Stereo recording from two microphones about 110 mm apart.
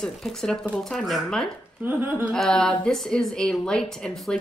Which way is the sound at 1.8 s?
20° right (ahead or behind).